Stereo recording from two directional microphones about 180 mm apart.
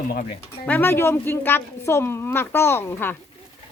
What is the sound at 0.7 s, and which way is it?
Speech, 10° left (ahead or behind).